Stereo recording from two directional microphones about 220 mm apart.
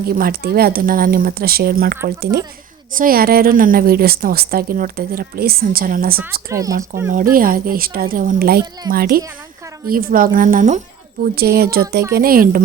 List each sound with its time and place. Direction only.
0.0 s a woman's voice: 45° right (ahead or behind)
6.5 s speech: 15° right (ahead or behind)
7.3 s a woman's voice: 40° right (ahead or behind)